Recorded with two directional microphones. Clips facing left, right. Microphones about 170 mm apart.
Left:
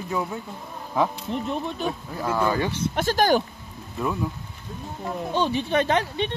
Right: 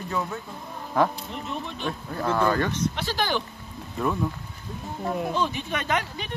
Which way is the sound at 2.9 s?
45° left (ahead or behind).